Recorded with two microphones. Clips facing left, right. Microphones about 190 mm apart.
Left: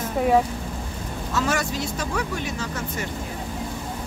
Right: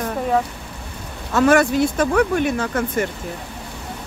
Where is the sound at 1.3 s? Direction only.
60° right (ahead or behind).